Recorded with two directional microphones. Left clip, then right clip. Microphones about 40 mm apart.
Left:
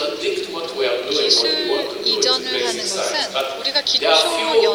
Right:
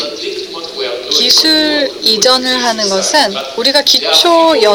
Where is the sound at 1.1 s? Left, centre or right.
Right.